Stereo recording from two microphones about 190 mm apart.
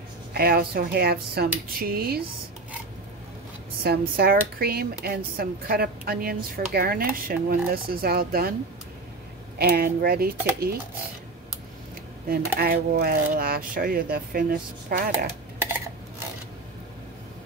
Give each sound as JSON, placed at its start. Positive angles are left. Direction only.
{"t": 0.3, "sound": "speech", "side_deg": -55}
{"t": 3.8, "sound": "speech", "side_deg": -55}
{"t": 9.6, "sound": "speech", "side_deg": -50}
{"t": 12.3, "sound": "speech", "side_deg": -50}